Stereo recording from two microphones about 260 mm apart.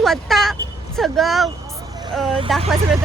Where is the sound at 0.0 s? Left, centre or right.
Centre.